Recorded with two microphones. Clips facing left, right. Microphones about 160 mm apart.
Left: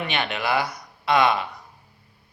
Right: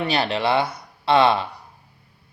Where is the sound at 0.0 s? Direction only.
30° right (ahead or behind).